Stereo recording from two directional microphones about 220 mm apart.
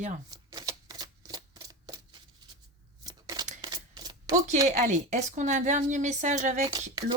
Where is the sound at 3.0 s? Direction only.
15° right (ahead or behind).